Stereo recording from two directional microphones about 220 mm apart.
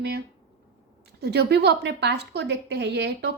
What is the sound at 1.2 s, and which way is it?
A woman's voice, 50° right (ahead or behind).